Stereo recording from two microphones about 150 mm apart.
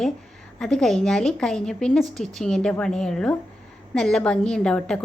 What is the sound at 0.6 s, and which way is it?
A woman's voice, 5° left (ahead or behind).